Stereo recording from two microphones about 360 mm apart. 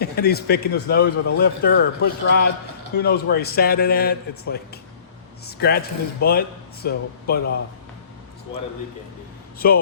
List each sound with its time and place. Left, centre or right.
0.0 s a man's voice: left
9.6 s speech: left